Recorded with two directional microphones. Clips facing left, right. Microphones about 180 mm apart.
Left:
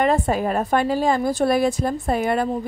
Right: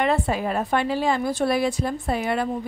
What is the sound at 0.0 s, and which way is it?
A woman's voice, 45° left (ahead or behind).